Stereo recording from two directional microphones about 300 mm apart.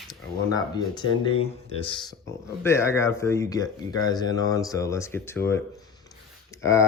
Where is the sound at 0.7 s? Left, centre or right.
Centre.